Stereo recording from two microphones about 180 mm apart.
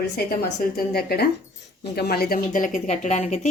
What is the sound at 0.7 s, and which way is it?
Speech, 60° left (ahead or behind).